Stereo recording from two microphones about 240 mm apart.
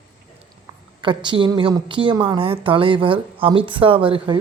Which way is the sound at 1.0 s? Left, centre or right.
Centre.